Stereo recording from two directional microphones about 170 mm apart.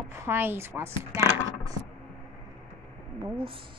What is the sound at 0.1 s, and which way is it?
Speech, 15° right (ahead or behind).